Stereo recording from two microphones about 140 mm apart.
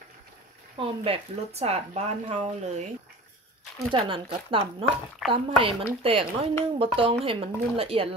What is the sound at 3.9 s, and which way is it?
Speech, 40° right (ahead or behind).